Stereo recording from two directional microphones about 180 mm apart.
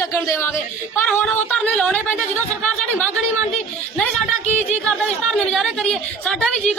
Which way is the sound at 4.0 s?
Centre (ahead or behind).